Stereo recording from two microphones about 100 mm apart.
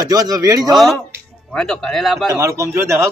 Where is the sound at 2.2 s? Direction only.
30° right (ahead or behind).